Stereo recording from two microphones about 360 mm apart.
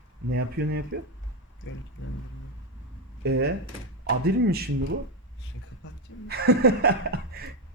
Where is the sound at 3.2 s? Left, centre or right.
Right.